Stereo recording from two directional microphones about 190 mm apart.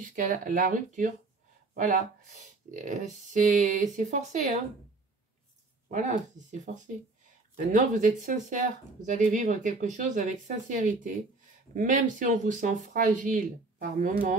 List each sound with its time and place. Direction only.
0.0 s speech: 45° right (ahead or behind)
5.9 s speech: 40° right (ahead or behind)